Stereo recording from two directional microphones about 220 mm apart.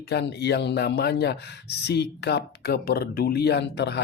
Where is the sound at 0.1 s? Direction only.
50° left (ahead or behind).